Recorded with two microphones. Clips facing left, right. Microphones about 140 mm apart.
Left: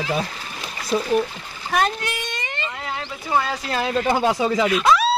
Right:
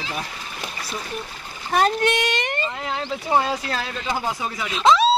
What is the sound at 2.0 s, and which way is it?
Speech, 90° right.